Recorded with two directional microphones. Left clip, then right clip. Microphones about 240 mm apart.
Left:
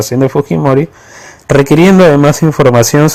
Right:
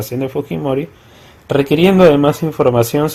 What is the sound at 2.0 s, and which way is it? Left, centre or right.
Speech, left.